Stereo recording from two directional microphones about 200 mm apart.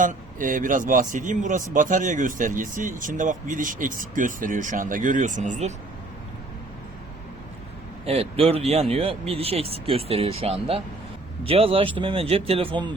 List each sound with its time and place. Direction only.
0.0 s a man's voice: 40° right (ahead or behind)
8.0 s speech: 30° right (ahead or behind)